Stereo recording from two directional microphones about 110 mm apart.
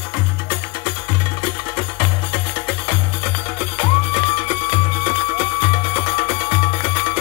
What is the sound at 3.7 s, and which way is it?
Music, 50° left (ahead or behind).